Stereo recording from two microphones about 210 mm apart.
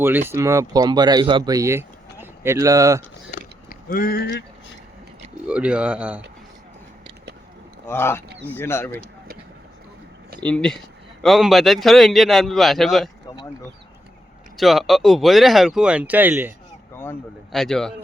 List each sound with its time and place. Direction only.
0.0 s speech: 10° right (ahead or behind)
3.3 s a sound: 40° left (ahead or behind)
5.5 s speech: 5° right (ahead or behind)
7.9 s speech: 10° left (ahead or behind)
10.4 s speech: 5° left (ahead or behind)
13.2 s a sound: 20° left (ahead or behind)
14.5 s speech: centre (ahead or behind)
17.0 s speech: 5° left (ahead or behind)